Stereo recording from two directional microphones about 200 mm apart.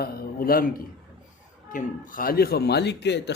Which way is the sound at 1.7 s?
40° left (ahead or behind).